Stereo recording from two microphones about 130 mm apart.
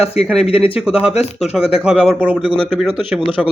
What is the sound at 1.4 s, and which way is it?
Speech, 5° right (ahead or behind).